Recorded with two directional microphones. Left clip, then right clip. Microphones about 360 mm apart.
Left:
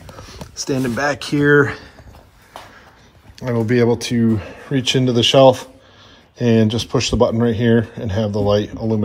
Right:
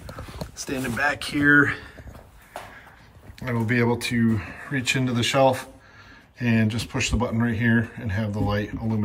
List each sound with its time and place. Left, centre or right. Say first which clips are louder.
0.6 s speech: left 6 dB; centre
3.3 s speech: left 7 dB; centre